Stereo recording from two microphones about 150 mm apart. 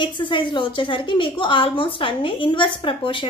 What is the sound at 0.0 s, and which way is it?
A woman's voice, 35° left (ahead or behind).